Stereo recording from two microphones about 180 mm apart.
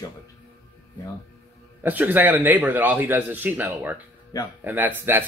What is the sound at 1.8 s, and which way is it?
Speech, 10° right (ahead or behind).